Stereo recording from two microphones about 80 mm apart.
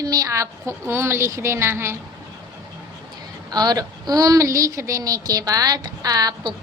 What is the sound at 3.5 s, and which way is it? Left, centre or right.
A woman's voice, right.